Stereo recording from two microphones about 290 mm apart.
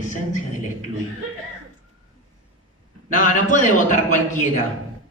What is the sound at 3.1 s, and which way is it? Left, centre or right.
Speech, left.